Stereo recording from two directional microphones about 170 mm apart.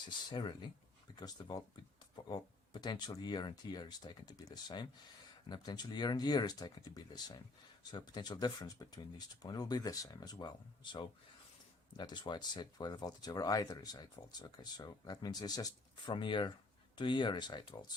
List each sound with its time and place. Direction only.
0.3 s speech: 25° left (ahead or behind)
11.9 s speech: 25° left (ahead or behind)